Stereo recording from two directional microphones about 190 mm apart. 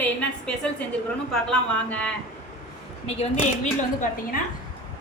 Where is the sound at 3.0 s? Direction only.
35° left (ahead or behind).